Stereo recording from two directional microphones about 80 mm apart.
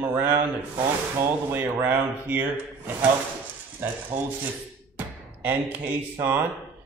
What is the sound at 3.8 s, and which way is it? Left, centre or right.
Speech, right.